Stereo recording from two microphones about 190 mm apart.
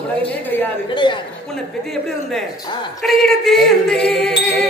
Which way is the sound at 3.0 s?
Centre (ahead or behind).